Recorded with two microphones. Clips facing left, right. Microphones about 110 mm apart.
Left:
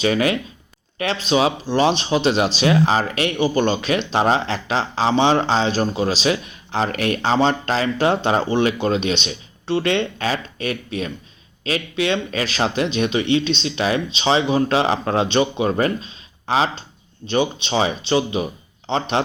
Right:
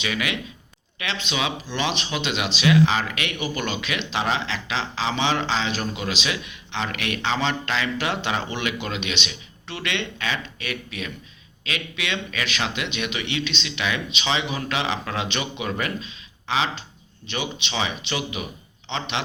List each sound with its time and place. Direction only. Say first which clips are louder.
0.0 s speech: left 9 dB; 35° left (ahead or behind)